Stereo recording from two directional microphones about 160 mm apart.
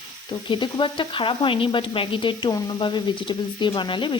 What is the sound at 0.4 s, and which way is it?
Speech, 30° left (ahead or behind).